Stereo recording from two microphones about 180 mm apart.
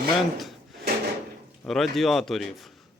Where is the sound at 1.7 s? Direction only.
Centre (ahead or behind).